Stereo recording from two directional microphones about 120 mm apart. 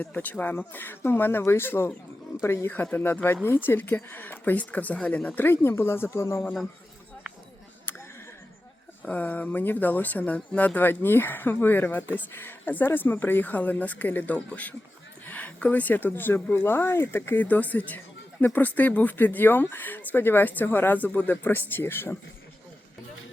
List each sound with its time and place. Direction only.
0.0 s speech: 15° left (ahead or behind)
9.0 s speech: 15° left (ahead or behind)